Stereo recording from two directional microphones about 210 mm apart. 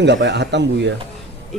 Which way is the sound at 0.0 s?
55° right (ahead or behind).